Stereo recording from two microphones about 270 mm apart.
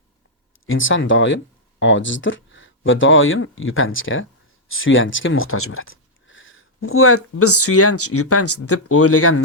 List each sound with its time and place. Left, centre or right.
0.6 s speech: left